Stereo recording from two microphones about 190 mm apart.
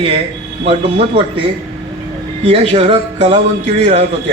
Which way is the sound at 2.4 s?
35° right (ahead or behind).